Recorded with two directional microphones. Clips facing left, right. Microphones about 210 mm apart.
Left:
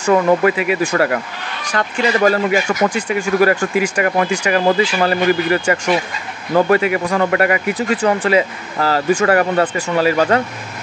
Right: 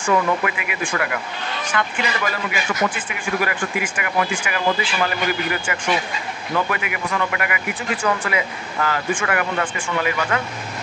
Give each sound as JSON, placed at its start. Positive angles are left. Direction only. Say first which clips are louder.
{"t": 0.0, "sound": "speech", "louder": "left 7 dB", "side_deg": 35}